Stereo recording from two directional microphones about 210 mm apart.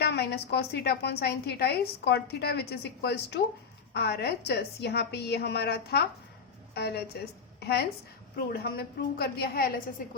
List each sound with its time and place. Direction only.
0.0 s a woman's voice: 50° left (ahead or behind)